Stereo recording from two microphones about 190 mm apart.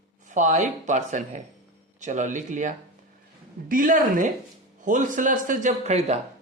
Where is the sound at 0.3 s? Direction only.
40° right (ahead or behind).